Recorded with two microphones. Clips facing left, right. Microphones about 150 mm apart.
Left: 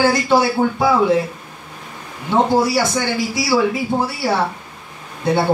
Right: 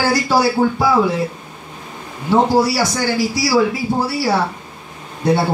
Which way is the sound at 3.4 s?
20° left (ahead or behind).